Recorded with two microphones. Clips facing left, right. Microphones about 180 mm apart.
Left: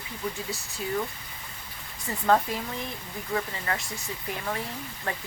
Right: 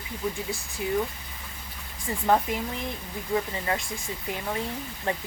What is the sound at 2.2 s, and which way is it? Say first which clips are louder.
Speech: even; 15° right (ahead or behind).